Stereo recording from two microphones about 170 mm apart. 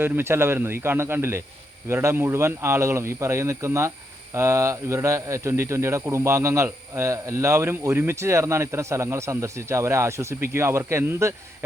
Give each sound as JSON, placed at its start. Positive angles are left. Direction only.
{"t": 0.0, "sound": "a man's voice", "side_deg": -15}